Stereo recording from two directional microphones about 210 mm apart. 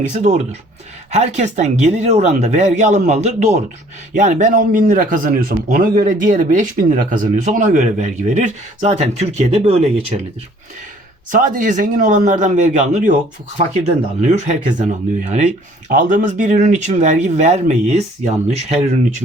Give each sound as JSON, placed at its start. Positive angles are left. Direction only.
{"t": 0.1, "sound": "speech", "side_deg": -35}
{"t": 11.3, "sound": "speech", "side_deg": -40}